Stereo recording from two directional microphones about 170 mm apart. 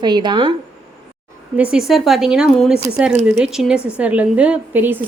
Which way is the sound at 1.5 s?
5° right (ahead or behind).